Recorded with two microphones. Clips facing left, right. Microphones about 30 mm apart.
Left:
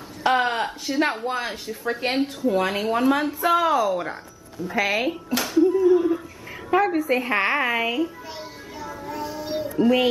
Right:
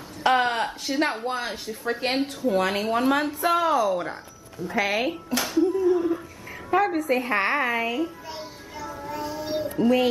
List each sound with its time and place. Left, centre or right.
0.2 s speech: centre
5.9 s a sound: centre
6.8 s speech: centre
8.3 s music: centre
9.8 s music: centre